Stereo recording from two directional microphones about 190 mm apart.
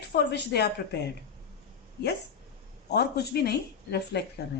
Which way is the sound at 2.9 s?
60° left (ahead or behind).